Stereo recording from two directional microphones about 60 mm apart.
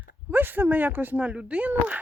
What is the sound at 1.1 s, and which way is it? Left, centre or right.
Speech, right.